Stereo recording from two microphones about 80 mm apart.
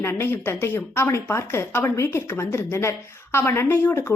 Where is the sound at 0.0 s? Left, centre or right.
Left.